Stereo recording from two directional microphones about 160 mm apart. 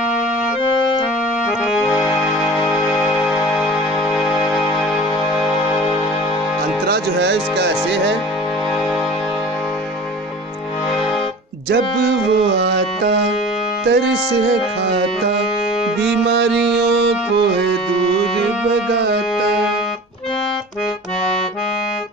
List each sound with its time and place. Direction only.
1.9 s music: centre (ahead or behind)
6.9 s music: 90° right
11.7 s music: 90° right
16.3 s music: 90° right
18.9 s music: 90° right